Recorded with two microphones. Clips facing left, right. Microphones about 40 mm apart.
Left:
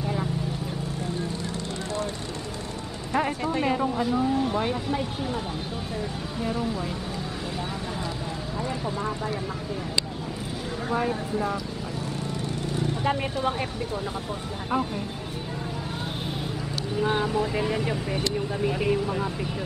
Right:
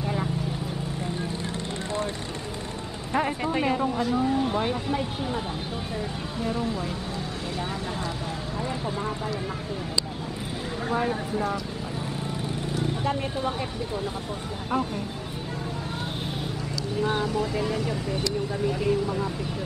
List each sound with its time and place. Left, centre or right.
0.0 s vehicle: centre
3.1 s speech: centre
6.4 s speech: centre
10.9 s speech: centre
13.0 s speech: centre
17.0 s speech: centre